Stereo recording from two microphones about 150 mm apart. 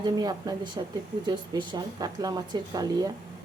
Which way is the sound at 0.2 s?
25° right (ahead or behind).